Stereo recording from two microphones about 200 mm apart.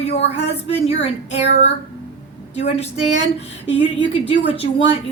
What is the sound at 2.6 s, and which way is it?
A woman's voice, 35° left (ahead or behind).